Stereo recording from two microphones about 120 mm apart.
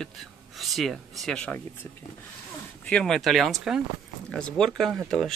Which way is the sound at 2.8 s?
5° left (ahead or behind).